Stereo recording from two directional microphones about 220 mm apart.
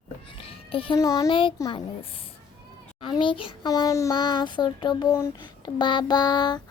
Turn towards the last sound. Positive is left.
turn(degrees=20)  # may be behind; listen again after turning